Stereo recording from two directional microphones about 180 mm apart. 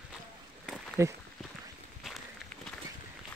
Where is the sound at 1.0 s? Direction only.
15° right (ahead or behind).